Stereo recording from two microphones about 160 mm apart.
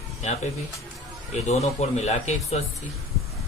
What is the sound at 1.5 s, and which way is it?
Speech, 40° left (ahead or behind).